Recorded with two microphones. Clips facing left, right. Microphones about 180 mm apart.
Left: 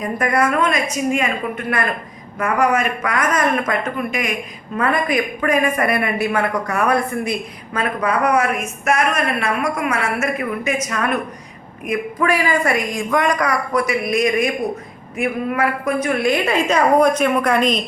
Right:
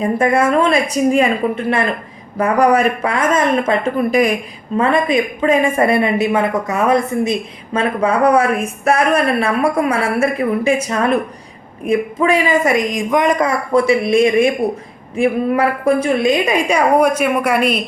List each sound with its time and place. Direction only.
0.0 s a woman's voice: 25° right (ahead or behind); by 17.8 s 10° right (ahead or behind)